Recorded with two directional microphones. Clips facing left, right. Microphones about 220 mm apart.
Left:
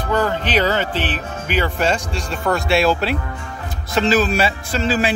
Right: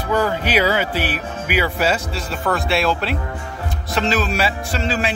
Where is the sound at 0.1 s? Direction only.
10° right (ahead or behind).